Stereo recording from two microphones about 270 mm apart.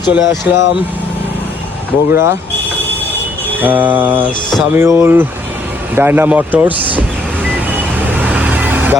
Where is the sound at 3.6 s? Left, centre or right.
Centre.